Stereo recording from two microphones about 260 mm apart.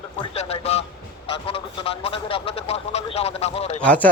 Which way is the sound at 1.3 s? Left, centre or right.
Left.